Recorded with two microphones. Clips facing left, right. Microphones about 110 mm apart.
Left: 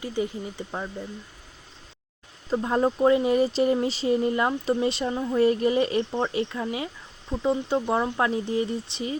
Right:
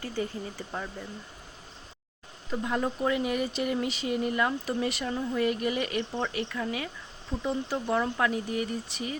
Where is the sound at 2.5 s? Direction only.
35° left (ahead or behind).